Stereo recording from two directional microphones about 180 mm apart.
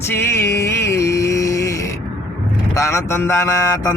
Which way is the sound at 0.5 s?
15° left (ahead or behind).